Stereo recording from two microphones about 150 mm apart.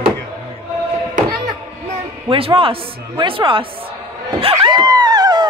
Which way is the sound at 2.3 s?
40° right (ahead or behind).